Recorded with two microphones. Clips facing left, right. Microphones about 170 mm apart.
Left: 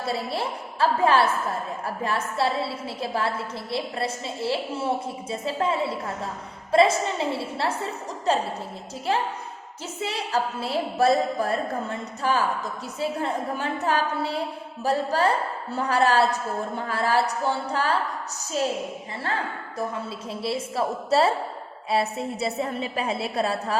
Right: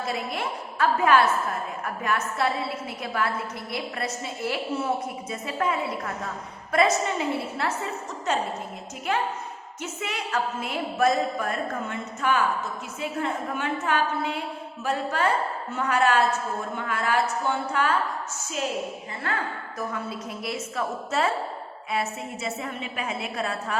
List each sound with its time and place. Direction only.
0.0 s a woman's voice: 35° left (ahead or behind)